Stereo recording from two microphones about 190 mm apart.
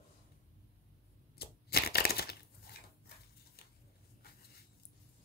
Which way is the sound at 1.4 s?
55° left (ahead or behind).